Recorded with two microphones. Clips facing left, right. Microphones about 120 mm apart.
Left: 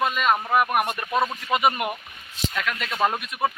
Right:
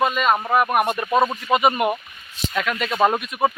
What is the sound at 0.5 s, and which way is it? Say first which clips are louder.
Speech: right 3 dB; 5° left (ahead or behind).